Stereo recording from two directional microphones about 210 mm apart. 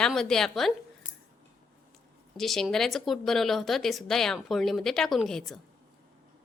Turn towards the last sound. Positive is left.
turn(degrees=0)  # may be behind; listen again after turning